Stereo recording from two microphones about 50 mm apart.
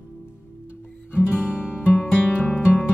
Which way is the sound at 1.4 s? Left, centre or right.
Centre.